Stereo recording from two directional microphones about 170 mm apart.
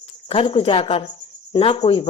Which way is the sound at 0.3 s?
30° left (ahead or behind).